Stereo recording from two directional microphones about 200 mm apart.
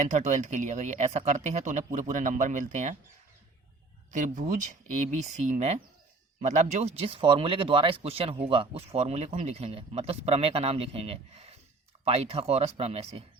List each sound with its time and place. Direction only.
0.1 s speech: 35° right (ahead or behind)
4.1 s speech: 40° right (ahead or behind)